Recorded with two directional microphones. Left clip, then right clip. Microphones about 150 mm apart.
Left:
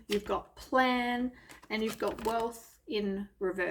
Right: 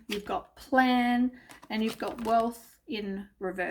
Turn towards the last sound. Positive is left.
turn(degrees=-30)  # may be behind; listen again after turning